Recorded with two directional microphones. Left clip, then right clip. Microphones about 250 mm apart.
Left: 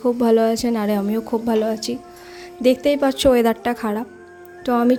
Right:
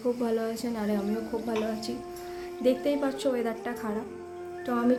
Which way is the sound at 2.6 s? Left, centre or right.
Left.